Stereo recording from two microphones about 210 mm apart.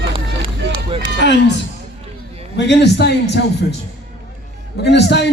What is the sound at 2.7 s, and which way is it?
Speech, 55° left (ahead or behind).